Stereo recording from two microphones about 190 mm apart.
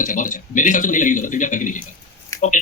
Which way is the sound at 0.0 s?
45° left (ahead or behind).